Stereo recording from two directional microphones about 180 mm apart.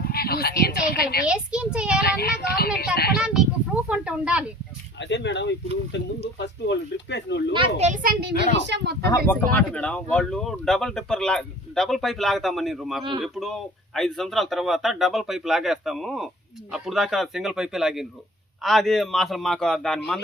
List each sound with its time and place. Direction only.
0.0 s speech: 60° left (ahead or behind)
1.3 s speech: 5° right (ahead or behind)
2.0 s speech: 60° left (ahead or behind)
3.2 s speech: 5° right (ahead or behind)
4.9 s speech: 80° left
7.5 s a child's voice: 25° right (ahead or behind)
7.9 s a child's voice: 45° right (ahead or behind)
8.5 s speech: 75° right (ahead or behind)
9.0 s speech: 10° left (ahead or behind)